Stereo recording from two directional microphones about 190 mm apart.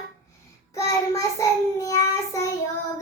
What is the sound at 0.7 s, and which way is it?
Child singing, 15° left (ahead or behind).